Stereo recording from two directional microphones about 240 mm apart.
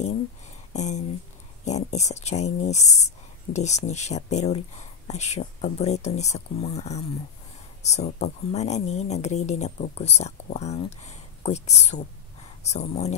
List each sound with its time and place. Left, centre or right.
0.7 s speech: left